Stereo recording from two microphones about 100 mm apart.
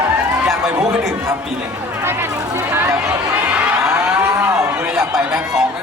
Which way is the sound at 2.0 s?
25° right (ahead or behind).